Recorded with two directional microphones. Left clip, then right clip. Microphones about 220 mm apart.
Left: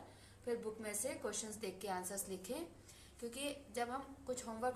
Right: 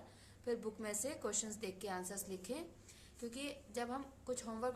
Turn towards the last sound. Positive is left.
turn(degrees=-25)  # may be behind; listen again after turning